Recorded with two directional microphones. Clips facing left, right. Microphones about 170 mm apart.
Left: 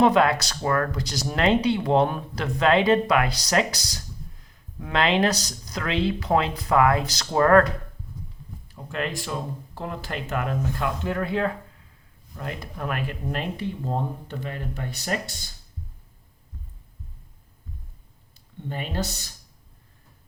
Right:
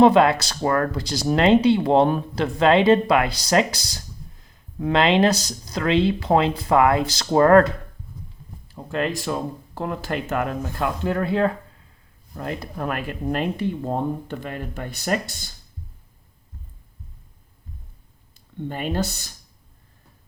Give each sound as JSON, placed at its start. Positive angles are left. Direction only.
{"t": 0.0, "sound": "speech", "side_deg": -30}
{"t": 9.7, "sound": "speech", "side_deg": -50}
{"t": 14.3, "sound": "speech", "side_deg": -50}
{"t": 18.7, "sound": "speech", "side_deg": -55}